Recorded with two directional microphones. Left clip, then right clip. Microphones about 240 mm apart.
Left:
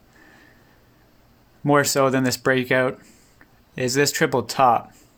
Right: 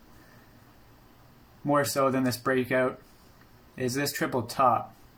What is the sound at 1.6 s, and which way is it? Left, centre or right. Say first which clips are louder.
Speech: left 7 dB; left.